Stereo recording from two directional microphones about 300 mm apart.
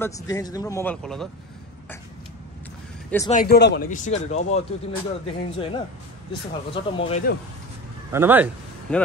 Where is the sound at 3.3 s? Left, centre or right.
Left.